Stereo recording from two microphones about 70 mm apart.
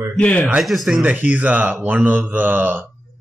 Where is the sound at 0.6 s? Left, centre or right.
Centre.